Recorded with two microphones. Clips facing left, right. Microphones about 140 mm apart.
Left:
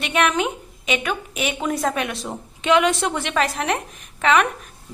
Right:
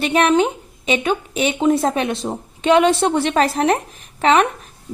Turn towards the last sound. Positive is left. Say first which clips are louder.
# right 3 dB
turn(degrees=-30)  # may be behind; listen again after turning